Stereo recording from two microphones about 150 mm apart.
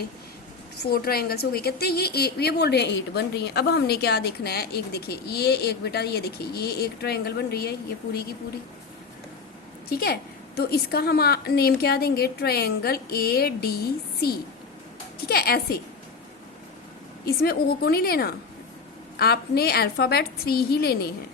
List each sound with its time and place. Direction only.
0.8 s a woman's voice: 90° left
9.9 s a woman's voice: 90° left
17.2 s a woman's voice: 90° left